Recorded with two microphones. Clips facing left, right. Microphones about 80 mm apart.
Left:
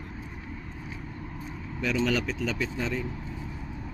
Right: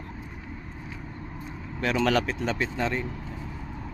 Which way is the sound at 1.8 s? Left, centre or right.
Right.